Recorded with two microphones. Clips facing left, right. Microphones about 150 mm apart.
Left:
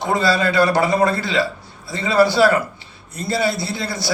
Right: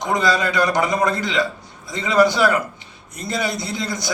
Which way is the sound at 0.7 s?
15° right (ahead or behind).